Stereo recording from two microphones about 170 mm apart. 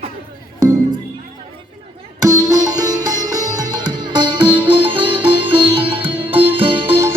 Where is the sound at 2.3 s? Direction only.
20° right (ahead or behind).